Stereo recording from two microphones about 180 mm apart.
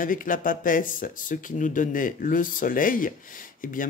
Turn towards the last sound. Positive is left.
turn(degrees=50)  # may be behind; listen again after turning